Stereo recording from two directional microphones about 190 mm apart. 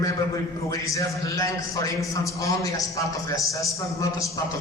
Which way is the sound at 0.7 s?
15° left (ahead or behind).